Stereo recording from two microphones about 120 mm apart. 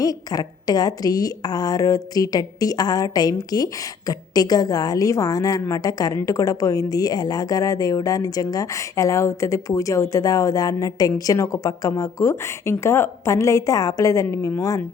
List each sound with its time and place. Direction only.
0.0 s a woman's voice: 30° left (ahead or behind)